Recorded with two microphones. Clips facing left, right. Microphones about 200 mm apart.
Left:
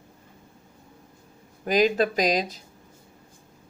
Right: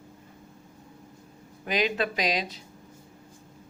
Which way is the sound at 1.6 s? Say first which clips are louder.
Left 6 dB; 40° left (ahead or behind).